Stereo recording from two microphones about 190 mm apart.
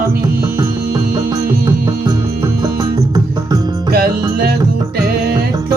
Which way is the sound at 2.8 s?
20° right (ahead or behind).